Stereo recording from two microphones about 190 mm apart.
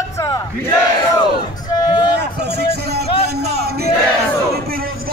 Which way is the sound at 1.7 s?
20° left (ahead or behind).